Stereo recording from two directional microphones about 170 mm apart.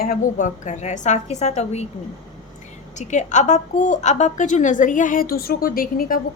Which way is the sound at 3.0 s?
45° left (ahead or behind).